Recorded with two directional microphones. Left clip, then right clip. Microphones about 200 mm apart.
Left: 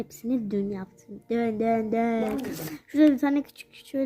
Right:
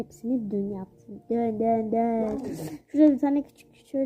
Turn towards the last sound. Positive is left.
turn(degrees=15)  # may be behind; listen again after turning